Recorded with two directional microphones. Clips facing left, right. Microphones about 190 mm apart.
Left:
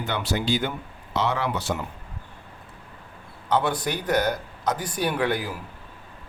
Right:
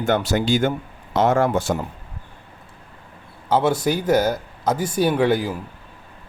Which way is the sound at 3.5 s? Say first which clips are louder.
Right 5 dB; 25° right (ahead or behind).